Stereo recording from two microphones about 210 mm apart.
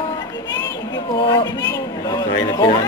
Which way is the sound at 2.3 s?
15° left (ahead or behind).